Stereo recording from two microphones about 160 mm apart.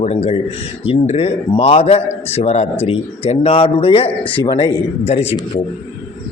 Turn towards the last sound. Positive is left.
turn(degrees=40)  # may be behind; listen again after turning